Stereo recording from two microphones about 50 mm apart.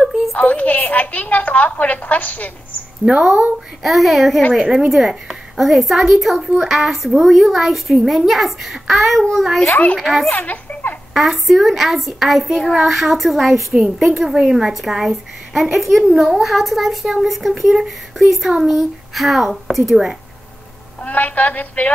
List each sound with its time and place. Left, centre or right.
0.4 s a woman's voice: left
3.0 s speech: centre
3.8 s a child's voice: centre
10.3 s a woman's voice: left
11.1 s a child's voice: centre
21.0 s a woman's voice: left